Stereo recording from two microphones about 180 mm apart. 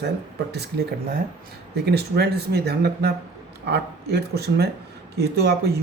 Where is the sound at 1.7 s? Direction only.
65° right (ahead or behind).